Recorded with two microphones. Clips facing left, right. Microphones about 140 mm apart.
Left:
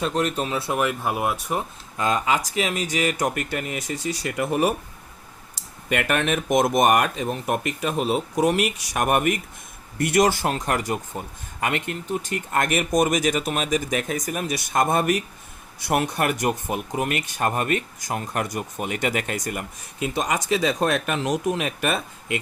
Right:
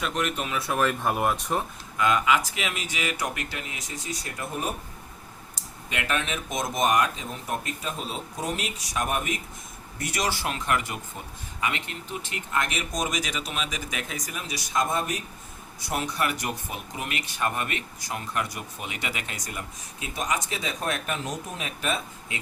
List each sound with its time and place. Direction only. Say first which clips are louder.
0.0 s speech: left 5 dB; 35° left (ahead or behind)
0.8 s speech: right 1 dB; 10° left (ahead or behind)
2.0 s speech: even; 35° left (ahead or behind); by 4.7 s 75° left (ahead or behind)
5.5 s speech: left 8 dB; 60° left (ahead or behind)